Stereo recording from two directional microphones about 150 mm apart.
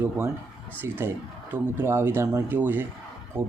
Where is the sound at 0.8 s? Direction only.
15° right (ahead or behind).